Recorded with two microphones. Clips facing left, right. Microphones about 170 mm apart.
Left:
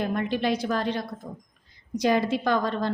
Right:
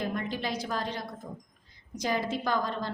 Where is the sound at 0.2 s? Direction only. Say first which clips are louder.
Left 7 dB; 65° left (ahead or behind).